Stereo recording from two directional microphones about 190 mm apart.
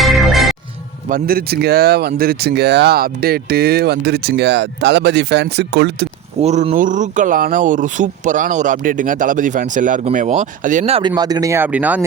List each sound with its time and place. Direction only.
0.0 s music: centre (ahead or behind)
1.0 s speech: 50° right (ahead or behind)
6.4 s speech: 35° right (ahead or behind)
11.1 s speech: 20° right (ahead or behind)